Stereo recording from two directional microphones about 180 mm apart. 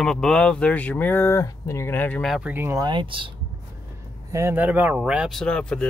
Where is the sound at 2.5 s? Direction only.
15° right (ahead or behind).